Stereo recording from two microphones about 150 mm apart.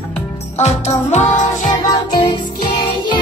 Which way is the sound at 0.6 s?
45° left (ahead or behind).